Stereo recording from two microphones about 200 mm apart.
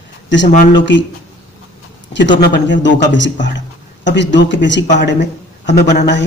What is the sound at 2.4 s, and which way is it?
A man's voice, 65° left (ahead or behind).